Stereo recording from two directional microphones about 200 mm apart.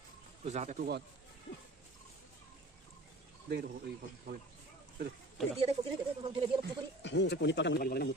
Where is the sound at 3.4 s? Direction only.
55° right (ahead or behind).